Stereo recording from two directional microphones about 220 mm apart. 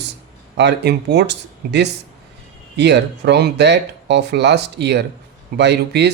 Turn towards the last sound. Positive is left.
turn(degrees=-50)  # may be behind; listen again after turning